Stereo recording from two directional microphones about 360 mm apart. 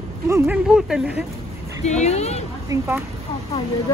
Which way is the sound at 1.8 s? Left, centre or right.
Centre.